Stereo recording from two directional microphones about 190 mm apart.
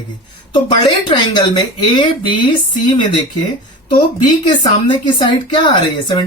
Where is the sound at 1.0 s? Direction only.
20° left (ahead or behind).